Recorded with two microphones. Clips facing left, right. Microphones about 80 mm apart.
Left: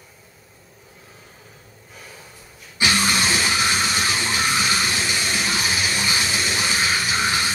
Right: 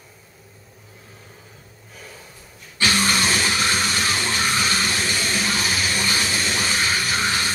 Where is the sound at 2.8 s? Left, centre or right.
Centre.